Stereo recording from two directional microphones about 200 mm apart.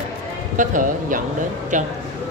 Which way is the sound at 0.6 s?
40° right (ahead or behind).